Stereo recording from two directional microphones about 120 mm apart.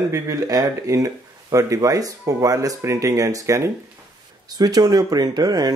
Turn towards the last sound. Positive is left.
turn(degrees=-35)  # may be behind; listen again after turning